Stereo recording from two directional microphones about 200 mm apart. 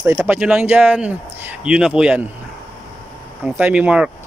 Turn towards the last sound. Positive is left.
turn(degrees=-5)  # may be behind; listen again after turning